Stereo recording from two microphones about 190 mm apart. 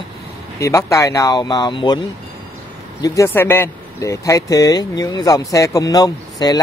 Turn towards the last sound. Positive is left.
turn(degrees=20)  # may be behind; listen again after turning